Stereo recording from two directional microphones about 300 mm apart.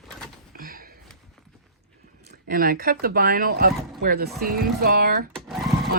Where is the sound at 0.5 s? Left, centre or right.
Right.